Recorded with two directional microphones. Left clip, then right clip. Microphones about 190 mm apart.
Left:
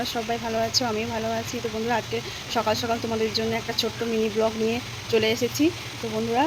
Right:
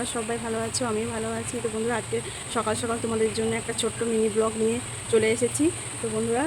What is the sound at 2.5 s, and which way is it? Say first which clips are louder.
Speech: left 3 dB; 10° right (ahead or behind).